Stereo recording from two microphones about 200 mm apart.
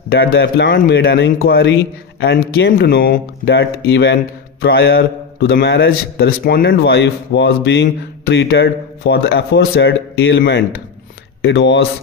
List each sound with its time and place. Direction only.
0.4 s a man's voice: 50° left (ahead or behind); by 10.3 s 65° left (ahead or behind)
10.3 s a man's voice: 50° left (ahead or behind)
11.4 s a man's voice: 60° left (ahead or behind)